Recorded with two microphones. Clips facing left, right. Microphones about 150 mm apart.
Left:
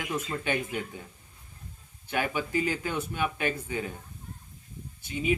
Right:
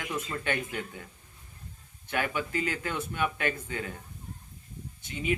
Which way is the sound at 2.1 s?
20° left (ahead or behind).